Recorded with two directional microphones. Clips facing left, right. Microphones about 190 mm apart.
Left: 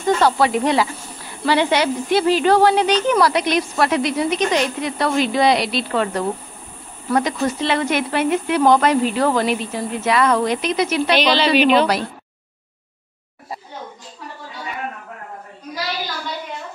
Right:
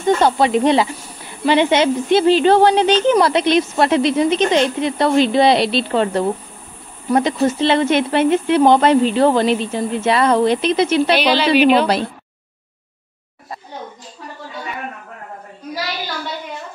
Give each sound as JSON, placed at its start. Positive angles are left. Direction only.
{"t": 0.0, "sound": "speech", "side_deg": -20}
{"t": 11.1, "sound": "a woman's voice", "side_deg": -10}